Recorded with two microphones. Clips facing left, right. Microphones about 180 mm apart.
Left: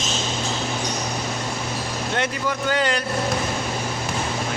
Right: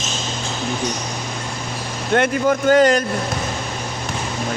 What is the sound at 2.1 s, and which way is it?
Speech, 50° right (ahead or behind).